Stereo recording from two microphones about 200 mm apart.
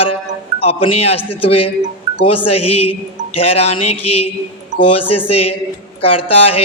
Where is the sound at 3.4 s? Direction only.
30° left (ahead or behind).